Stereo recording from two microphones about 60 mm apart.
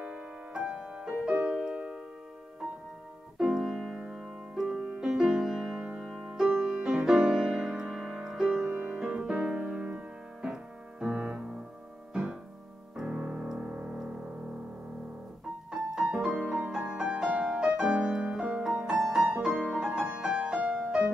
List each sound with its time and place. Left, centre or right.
0.0 s music: centre
3.3 s music: centre
5.9 s music: centre
9.1 s piano: centre
12.9 s piano: centre
13.2 s music: centre
15.7 s music: centre